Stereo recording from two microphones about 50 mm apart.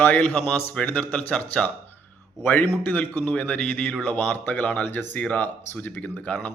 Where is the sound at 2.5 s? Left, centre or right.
Left.